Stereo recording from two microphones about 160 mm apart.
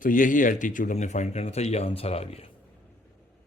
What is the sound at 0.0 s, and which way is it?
Speech, 55° left (ahead or behind).